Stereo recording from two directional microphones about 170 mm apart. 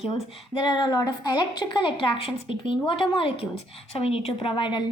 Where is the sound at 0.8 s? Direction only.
25° left (ahead or behind).